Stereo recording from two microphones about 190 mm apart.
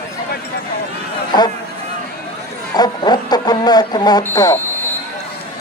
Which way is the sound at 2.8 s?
20° left (ahead or behind).